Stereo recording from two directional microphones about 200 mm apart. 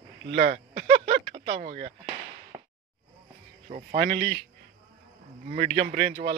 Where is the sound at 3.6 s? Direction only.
40° right (ahead or behind).